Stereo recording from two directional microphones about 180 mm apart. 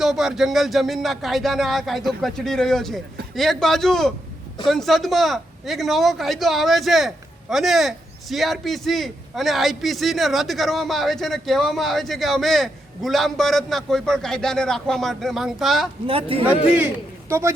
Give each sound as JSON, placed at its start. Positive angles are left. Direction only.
{"t": 0.0, "sound": "a man's voice", "side_deg": 0}
{"t": 16.0, "sound": "speech", "side_deg": -30}
{"t": 16.7, "sound": "a man's voice", "side_deg": -10}